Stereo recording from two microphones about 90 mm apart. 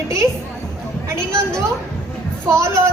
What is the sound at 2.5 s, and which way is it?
Speech, 35° right (ahead or behind).